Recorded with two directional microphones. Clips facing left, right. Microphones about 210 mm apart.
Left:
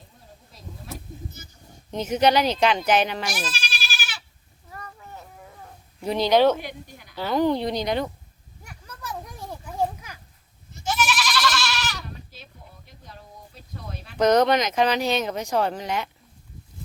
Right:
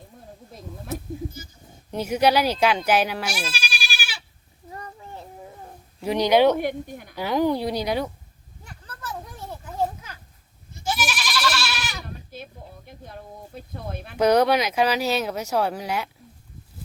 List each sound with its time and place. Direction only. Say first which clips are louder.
1.9 s speech: even; 10° right (ahead or behind)
4.7 s a sound: right 3 dB; 25° right (ahead or behind)
6.0 s speech: right 1 dB; 10° right (ahead or behind)
6.6 s speech: right 10 dB; 55° right (ahead or behind)
7.2 s speech: even; 10° right (ahead or behind)
8.6 s a sound: even; 10° left (ahead or behind)
9.5 s children playing: even; 10° left (ahead or behind)
10.8 s goat: left 2 dB; 10° right (ahead or behind)
12.0 s a sound: right 4 dB; 55° right (ahead or behind)
14.2 s speech: even; 10° right (ahead or behind)